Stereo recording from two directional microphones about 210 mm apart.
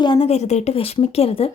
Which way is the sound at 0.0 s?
25° left (ahead or behind).